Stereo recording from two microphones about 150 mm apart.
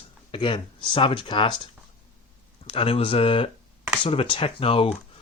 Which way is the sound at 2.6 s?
40° left (ahead or behind).